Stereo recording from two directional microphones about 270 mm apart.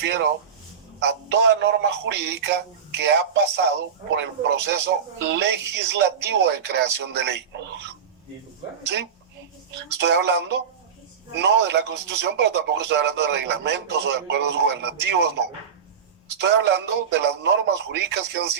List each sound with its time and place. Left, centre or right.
0.0 s speech: right
10.0 s speech: right